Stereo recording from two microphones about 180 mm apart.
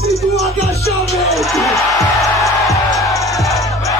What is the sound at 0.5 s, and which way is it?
Music, 35° left (ahead or behind).